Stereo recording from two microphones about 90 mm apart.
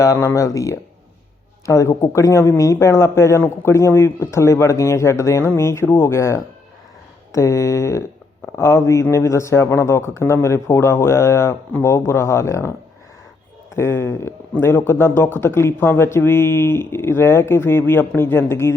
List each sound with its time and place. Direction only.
0.0 s a man's voice: 35° left (ahead or behind)
13.7 s speech: 30° left (ahead or behind)